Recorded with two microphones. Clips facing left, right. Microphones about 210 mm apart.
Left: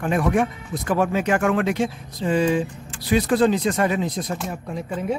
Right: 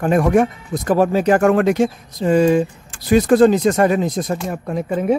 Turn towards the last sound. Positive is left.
turn(degrees=-60)  # may be behind; listen again after turning